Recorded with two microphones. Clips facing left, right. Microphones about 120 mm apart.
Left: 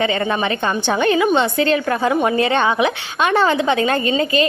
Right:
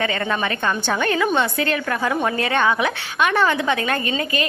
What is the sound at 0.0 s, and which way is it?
A woman's voice, 20° left (ahead or behind).